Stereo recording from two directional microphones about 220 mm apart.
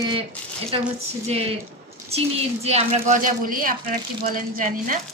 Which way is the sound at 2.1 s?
25° right (ahead or behind).